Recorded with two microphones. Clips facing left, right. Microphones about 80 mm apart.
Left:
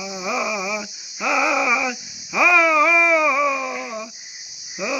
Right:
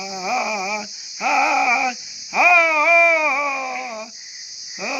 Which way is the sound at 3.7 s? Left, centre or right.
Left.